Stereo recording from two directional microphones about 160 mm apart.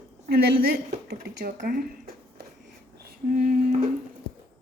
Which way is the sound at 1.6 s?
65° right (ahead or behind).